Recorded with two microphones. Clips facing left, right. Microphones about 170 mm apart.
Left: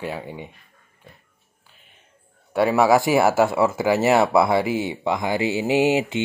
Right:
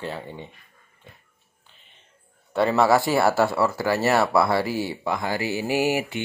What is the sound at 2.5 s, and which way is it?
Speech, 10° left (ahead or behind).